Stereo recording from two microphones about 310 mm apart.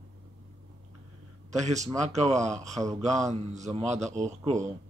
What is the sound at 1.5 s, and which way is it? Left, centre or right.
A man's voice, right.